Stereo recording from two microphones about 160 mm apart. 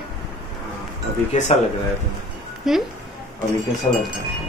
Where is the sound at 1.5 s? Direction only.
45° left (ahead or behind).